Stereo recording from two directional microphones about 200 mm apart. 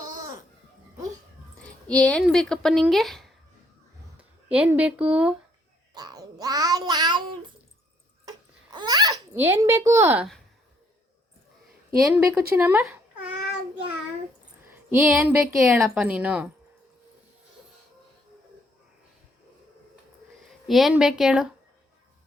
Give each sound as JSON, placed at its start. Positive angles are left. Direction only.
{"t": 1.6, "sound": "speech", "side_deg": 5}
{"t": 5.9, "sound": "speech", "side_deg": -20}
{"t": 8.2, "sound": "babbling", "side_deg": -20}
{"t": 9.3, "sound": "speech", "side_deg": -10}
{"t": 11.9, "sound": "a child's voice", "side_deg": -10}
{"t": 14.6, "sound": "a sound", "side_deg": -5}
{"t": 15.2, "sound": "speech", "side_deg": -15}
{"t": 15.5, "sound": "a woman's voice", "side_deg": 0}
{"t": 20.4, "sound": "speech", "side_deg": 0}